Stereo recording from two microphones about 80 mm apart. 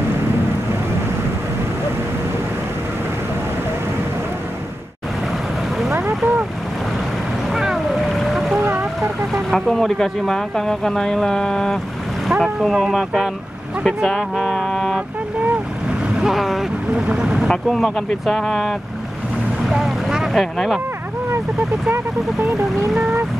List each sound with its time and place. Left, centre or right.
5.9 s boat: right
7.5 s boat: centre
8.5 s boat: right
9.3 s speech: centre
16.2 s speech: centre
17.5 s speech: centre
19.7 s boat: centre
20.5 s speech: centre